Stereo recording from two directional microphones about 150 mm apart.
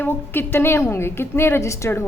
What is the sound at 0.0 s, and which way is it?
A woman's voice, 15° left (ahead or behind).